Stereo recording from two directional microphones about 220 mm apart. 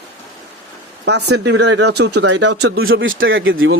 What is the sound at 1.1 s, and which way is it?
A man's voice, 50° right (ahead or behind).